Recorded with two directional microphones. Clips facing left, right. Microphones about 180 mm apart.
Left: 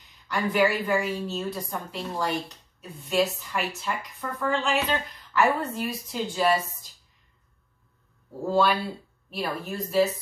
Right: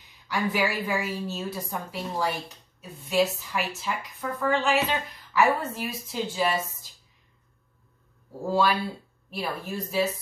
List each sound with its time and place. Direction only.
0.3 s a woman's voice: 5° right (ahead or behind)
8.5 s a woman's voice: 5° right (ahead or behind)